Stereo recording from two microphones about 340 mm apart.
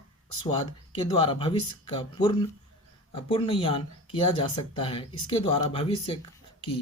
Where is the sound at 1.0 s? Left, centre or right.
Centre.